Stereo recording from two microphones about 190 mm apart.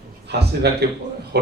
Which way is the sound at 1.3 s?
55° right (ahead or behind).